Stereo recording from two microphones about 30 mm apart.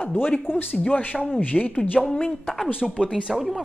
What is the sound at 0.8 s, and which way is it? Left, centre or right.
Speech, left.